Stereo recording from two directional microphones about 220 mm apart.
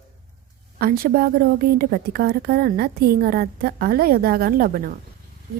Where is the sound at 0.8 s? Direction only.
40° right (ahead or behind).